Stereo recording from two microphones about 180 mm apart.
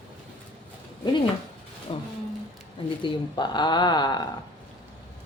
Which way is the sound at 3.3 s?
25° left (ahead or behind).